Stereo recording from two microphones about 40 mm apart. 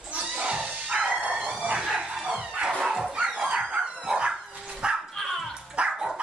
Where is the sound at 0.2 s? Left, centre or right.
Right.